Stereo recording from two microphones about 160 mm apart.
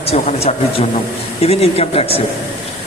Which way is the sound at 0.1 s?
45° left (ahead or behind).